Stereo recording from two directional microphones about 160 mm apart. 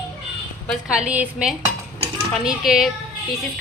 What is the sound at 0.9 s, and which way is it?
A woman's voice, 5° right (ahead or behind).